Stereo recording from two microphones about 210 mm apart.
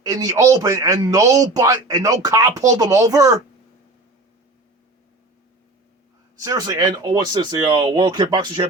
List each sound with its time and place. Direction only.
0.0 s a man's voice: 15° right (ahead or behind)
6.4 s a man's voice: 15° right (ahead or behind)